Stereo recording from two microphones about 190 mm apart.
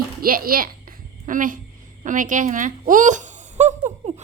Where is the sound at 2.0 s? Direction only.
45° right (ahead or behind).